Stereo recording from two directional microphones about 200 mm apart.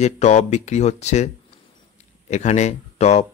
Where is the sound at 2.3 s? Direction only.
35° left (ahead or behind).